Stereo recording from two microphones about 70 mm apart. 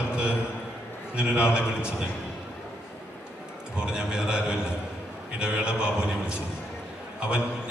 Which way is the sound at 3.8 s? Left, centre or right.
Centre.